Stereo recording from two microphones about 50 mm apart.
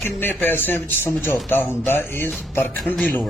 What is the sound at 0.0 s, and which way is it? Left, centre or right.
Speech, left.